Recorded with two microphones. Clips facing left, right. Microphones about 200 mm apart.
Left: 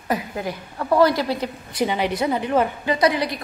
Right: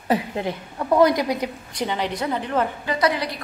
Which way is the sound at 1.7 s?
10° left (ahead or behind).